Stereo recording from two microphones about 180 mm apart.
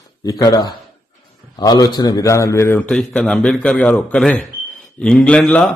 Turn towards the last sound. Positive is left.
turn(degrees=5)  # may be behind; listen again after turning